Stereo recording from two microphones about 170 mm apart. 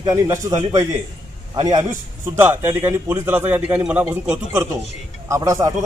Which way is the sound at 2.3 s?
10° right (ahead or behind).